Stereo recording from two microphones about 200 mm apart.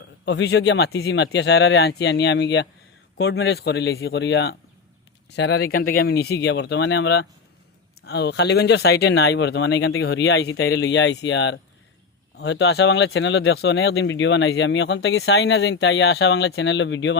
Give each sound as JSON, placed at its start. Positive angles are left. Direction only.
{"t": 0.3, "sound": "speech", "side_deg": 60}